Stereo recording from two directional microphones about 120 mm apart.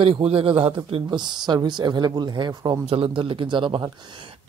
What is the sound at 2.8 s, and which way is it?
Speech, 50° right (ahead or behind).